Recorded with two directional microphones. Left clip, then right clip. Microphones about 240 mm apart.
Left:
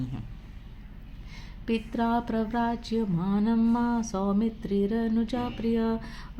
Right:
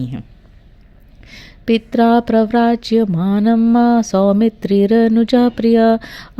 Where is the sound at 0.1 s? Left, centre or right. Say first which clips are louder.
Right 11 dB; right.